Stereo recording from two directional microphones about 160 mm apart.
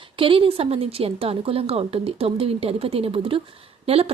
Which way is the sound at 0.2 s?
35° right (ahead or behind).